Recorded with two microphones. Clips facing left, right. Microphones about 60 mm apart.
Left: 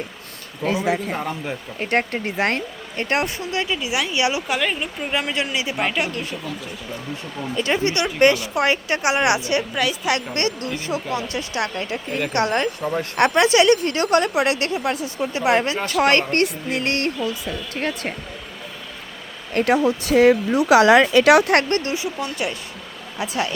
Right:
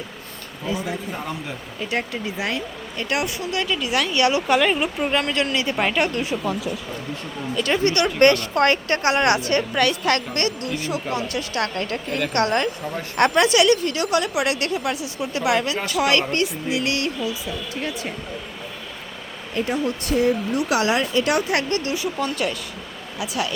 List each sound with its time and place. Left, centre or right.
0.6 s speech: left
1.5 s speech: left; by 4.4 s centre
4.4 s speech: centre
4.8 s speech: centre
5.1 s speech: centre
5.7 s speech: centre
7.5 s speech: left
9.7 s speech: centre
10.2 s speech: left
19.5 s speech: left
21.5 s speech: left
21.9 s speech: centre
23.1 s speech: left